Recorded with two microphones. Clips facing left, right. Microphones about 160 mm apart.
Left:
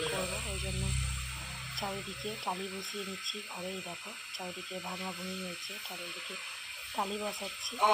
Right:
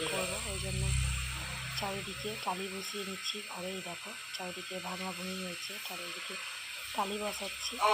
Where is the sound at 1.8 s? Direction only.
Centre (ahead or behind).